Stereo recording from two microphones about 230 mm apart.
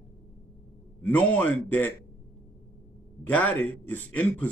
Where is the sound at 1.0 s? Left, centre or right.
Centre.